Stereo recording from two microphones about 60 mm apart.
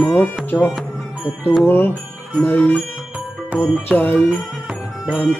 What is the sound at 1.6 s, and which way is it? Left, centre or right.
Music, left.